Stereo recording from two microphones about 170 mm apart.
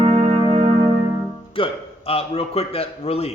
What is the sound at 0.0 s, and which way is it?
Music, 40° right (ahead or behind).